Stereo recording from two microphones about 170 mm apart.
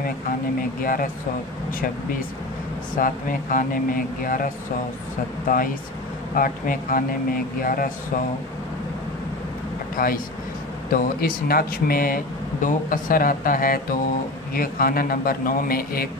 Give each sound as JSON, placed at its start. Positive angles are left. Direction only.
{"t": 0.0, "sound": "speech", "side_deg": 55}
{"t": 3.0, "sound": "speech", "side_deg": 55}
{"t": 6.3, "sound": "speech", "side_deg": 55}
{"t": 9.9, "sound": "speech", "side_deg": 55}